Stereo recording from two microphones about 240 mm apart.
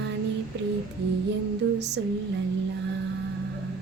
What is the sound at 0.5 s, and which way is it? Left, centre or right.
Music, right.